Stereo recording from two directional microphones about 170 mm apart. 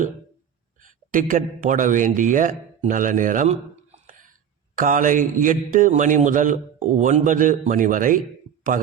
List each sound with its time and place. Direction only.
0.8 s speech: 50° right (ahead or behind)
4.7 s speech: 50° right (ahead or behind)